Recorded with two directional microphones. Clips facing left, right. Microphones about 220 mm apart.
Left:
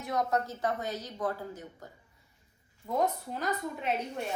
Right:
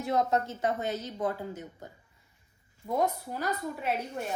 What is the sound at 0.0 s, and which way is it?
A woman's voice, 25° right (ahead or behind).